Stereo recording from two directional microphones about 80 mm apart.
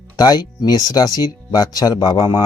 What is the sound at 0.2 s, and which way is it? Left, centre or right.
A man's voice, left.